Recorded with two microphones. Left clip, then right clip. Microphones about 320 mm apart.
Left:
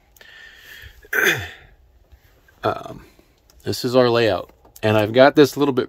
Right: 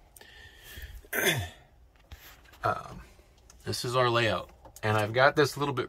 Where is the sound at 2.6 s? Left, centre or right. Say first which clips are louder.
Left 7 dB; left.